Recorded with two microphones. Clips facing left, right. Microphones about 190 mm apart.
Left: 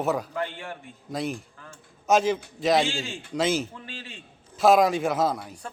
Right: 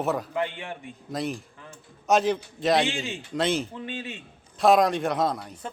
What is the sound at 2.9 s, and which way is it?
Speech, 20° right (ahead or behind).